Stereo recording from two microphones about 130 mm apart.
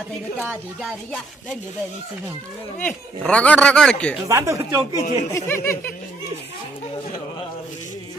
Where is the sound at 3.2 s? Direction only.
10° left (ahead or behind).